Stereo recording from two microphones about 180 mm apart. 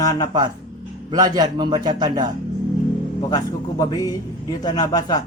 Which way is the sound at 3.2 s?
20° left (ahead or behind).